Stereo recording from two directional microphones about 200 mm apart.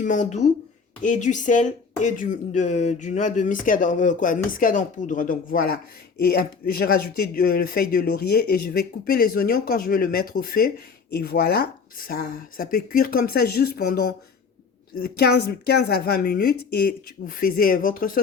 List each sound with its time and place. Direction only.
0.0 s speech: 40° left (ahead or behind)
15.2 s speech: 50° left (ahead or behind)